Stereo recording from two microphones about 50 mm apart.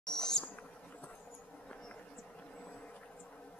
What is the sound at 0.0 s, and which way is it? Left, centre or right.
Insect, centre.